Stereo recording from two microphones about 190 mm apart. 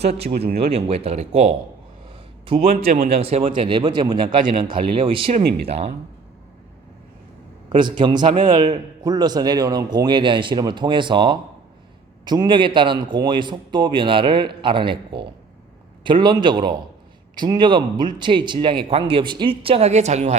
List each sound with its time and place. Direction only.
0.2 s speech: 55° right (ahead or behind)
0.7 s a man's voice: 30° right (ahead or behind)
5.4 s speech: 55° right (ahead or behind)
5.6 s speech: 35° right (ahead or behind)
7.7 s a man's voice: 25° right (ahead or behind)